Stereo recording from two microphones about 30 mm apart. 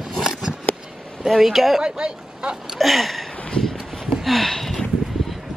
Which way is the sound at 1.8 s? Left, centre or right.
Right.